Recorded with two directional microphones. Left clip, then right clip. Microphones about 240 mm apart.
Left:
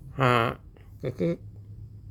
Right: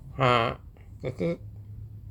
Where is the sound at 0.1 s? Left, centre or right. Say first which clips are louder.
Even; centre.